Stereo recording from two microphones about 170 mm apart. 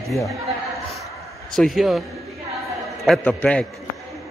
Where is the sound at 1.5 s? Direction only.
Centre (ahead or behind).